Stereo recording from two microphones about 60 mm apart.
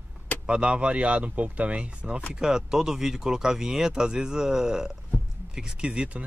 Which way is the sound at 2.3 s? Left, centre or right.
Centre.